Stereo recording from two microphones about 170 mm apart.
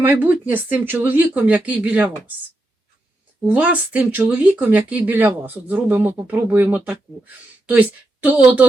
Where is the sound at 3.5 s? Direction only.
10° right (ahead or behind).